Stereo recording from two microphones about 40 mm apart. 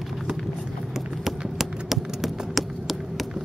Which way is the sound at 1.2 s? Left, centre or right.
Centre.